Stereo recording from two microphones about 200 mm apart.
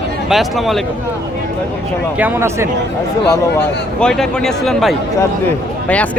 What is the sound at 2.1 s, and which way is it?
Speech, 10° right (ahead or behind).